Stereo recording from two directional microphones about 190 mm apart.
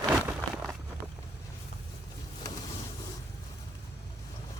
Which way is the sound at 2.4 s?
20° left (ahead or behind).